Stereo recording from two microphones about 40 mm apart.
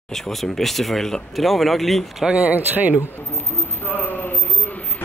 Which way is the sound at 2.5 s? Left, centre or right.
Right.